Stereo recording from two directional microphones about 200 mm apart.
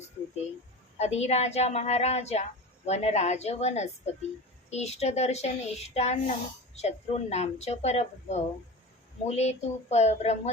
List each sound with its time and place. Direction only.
0.9 s a woman's voice: 35° left (ahead or behind)